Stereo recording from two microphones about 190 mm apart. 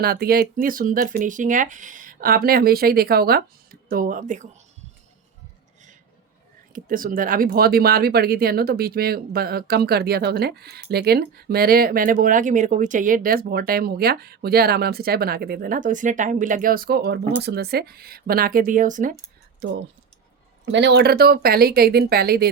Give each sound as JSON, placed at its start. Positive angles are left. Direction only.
{"t": 0.0, "sound": "speech", "side_deg": -55}
{"t": 6.7, "sound": "speech", "side_deg": -45}
{"t": 19.6, "sound": "speech", "side_deg": -65}